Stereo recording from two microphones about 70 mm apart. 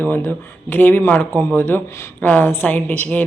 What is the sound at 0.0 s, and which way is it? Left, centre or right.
Speech, left.